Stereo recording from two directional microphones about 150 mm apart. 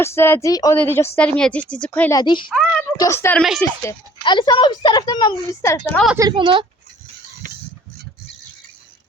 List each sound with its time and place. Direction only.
0.0 s speech: 15° left (ahead or behind)
2.1 s a child's voice: 30° left (ahead or behind)
2.5 s a sound: 5° left (ahead or behind)
3.0 s speech: 15° left (ahead or behind)
4.2 s a woman's voice: 30° left (ahead or behind)
5.6 s speech: 20° left (ahead or behind)
6.1 s a woman's voice: 30° right (ahead or behind)